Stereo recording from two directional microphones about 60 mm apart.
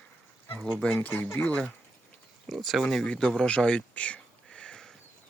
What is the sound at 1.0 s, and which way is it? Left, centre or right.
Speech, left.